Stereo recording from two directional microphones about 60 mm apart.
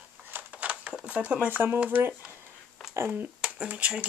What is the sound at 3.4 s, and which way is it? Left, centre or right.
Speech, centre.